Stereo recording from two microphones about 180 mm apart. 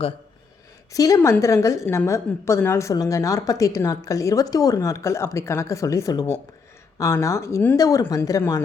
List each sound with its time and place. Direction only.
0.9 s a woman's voice: 20° left (ahead or behind)